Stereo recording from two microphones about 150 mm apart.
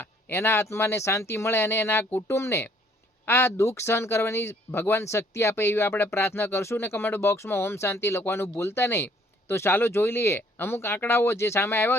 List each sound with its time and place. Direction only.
0.0 s speech: 15° left (ahead or behind)